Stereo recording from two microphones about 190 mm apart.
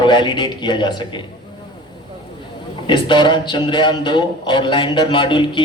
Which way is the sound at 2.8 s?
25° left (ahead or behind).